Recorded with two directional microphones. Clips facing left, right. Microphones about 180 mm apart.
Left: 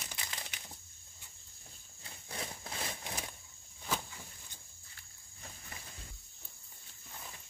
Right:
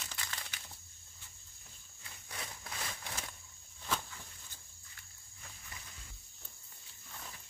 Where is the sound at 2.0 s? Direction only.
30° left (ahead or behind); by 4.3 s 10° left (ahead or behind).